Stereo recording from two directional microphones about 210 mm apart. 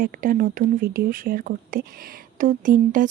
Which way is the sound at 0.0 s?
40° right (ahead or behind).